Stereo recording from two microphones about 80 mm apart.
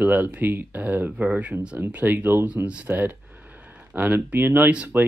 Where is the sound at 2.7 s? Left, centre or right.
Centre.